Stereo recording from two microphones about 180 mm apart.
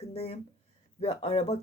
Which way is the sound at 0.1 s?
35° left (ahead or behind).